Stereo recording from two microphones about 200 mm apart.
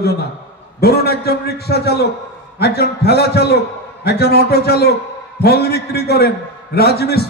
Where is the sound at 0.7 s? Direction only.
50° left (ahead or behind).